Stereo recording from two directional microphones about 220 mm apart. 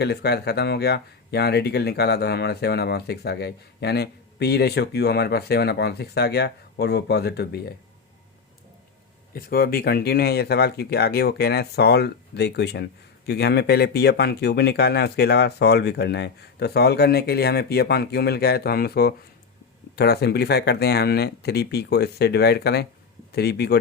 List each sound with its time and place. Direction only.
0.0 s speech: 45° left (ahead or behind)
9.3 s speech: 45° left (ahead or behind)